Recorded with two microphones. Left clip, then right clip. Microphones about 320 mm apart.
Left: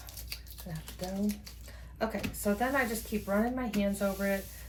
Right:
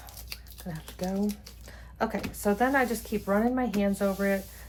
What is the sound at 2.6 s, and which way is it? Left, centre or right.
Speech, centre.